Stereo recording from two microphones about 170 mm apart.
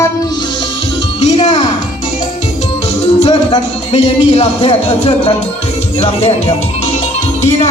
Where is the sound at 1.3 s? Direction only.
35° left (ahead or behind).